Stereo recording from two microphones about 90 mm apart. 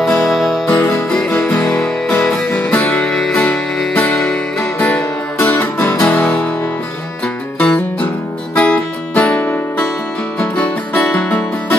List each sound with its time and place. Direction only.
0.0 s music: 5° left (ahead or behind)
0.7 s music: 30° left (ahead or behind)
1.3 s music: 20° left (ahead or behind)
3.3 s music: 20° left (ahead or behind)
7.5 s music: 10° left (ahead or behind)
11.0 s music: 10° left (ahead or behind)